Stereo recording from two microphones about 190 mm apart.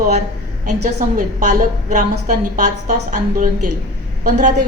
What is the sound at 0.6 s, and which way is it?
A woman's voice, 45° right (ahead or behind).